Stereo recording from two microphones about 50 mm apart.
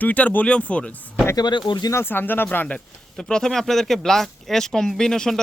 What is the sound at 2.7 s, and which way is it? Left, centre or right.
Speech, centre.